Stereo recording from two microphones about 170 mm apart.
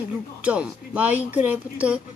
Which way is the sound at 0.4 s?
5° right (ahead or behind).